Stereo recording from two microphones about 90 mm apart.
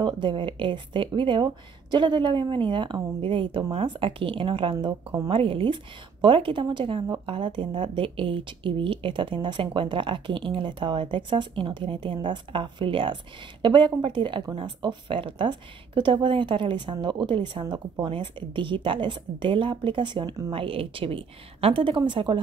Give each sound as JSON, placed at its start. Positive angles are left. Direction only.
{"t": 0.0, "sound": "a woman's voice", "side_deg": -65}
{"t": 6.2, "sound": "a woman's voice", "side_deg": -65}
{"t": 20.5, "sound": "a woman's voice", "side_deg": -80}